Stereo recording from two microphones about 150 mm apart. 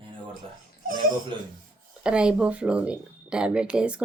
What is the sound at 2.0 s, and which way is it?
A woman's voice, 5° right (ahead or behind).